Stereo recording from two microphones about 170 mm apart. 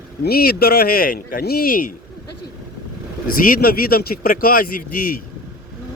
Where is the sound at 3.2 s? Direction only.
55° left (ahead or behind).